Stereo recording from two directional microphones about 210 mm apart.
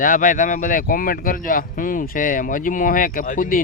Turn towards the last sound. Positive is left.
turn(degrees=40)  # may be behind; listen again after turning